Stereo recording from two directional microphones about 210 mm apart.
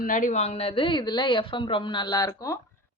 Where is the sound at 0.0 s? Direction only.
40° left (ahead or behind).